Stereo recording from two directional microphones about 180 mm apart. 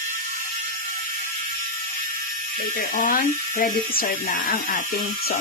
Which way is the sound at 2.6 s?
50° left (ahead or behind).